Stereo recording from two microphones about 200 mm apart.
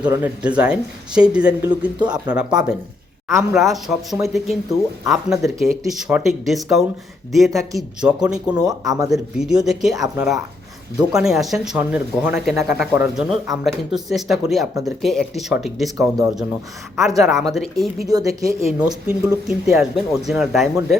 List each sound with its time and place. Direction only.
0.0 s speech: 5° right (ahead or behind)
16.0 s speech: 15° right (ahead or behind)
17.4 s speech: centre (ahead or behind)
18.1 s speech: 20° right (ahead or behind)
18.4 s speech: 5° right (ahead or behind)